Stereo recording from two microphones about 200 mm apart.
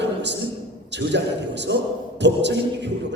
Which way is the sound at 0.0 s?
60° right (ahead or behind).